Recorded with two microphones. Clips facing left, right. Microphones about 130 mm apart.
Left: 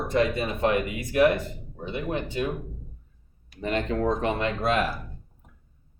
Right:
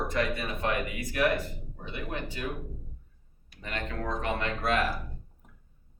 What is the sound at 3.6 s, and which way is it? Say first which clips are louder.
Speech: left 10 dB; 25° left (ahead or behind).